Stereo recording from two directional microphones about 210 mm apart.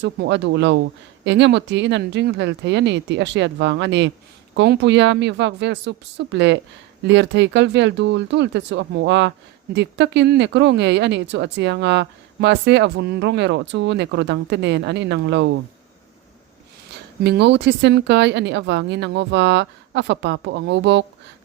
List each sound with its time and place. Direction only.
0.0 s speech: 55° right (ahead or behind)
17.2 s speech: 55° right (ahead or behind)